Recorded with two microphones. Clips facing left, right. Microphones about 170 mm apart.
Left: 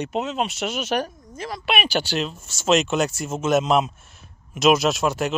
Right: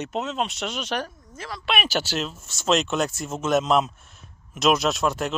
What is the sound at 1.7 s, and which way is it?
Speech, centre (ahead or behind).